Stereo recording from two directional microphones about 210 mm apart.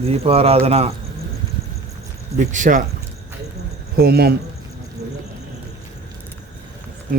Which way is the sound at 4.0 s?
50° right (ahead or behind).